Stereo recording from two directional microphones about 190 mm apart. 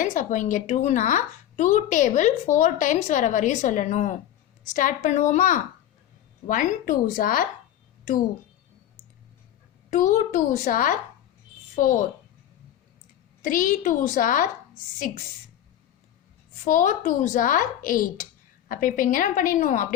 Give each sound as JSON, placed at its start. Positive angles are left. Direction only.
{"t": 0.0, "sound": "speech", "side_deg": 40}
{"t": 9.9, "sound": "a woman's voice", "side_deg": 40}
{"t": 13.4, "sound": "speech", "side_deg": 45}
{"t": 16.6, "sound": "speech", "side_deg": 40}